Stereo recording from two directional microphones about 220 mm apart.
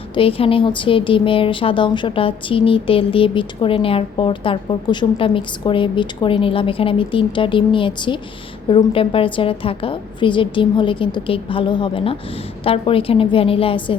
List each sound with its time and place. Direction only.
0.1 s speech: 25° left (ahead or behind)